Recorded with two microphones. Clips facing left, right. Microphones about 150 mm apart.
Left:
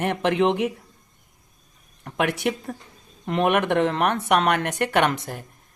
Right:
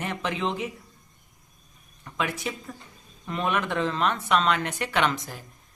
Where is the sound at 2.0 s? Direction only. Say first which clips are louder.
Left 7 dB; 70° left (ahead or behind).